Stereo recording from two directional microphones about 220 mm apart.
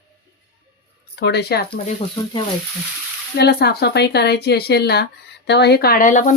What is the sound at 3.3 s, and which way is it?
Speech, 45° left (ahead or behind).